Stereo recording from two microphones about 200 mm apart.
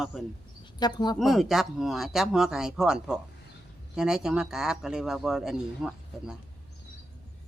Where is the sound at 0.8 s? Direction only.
20° left (ahead or behind).